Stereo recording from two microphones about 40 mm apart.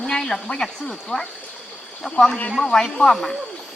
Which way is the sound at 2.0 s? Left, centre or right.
Left.